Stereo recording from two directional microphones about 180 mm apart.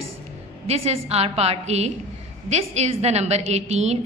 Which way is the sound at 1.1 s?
35° right (ahead or behind).